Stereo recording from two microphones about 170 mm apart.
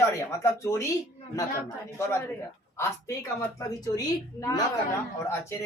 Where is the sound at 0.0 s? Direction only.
15° left (ahead or behind).